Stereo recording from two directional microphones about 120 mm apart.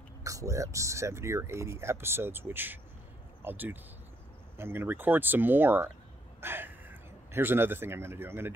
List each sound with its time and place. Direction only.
0.2 s speech: 25° right (ahead or behind)